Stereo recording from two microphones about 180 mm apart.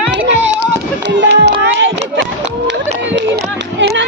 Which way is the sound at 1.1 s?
75° right (ahead or behind).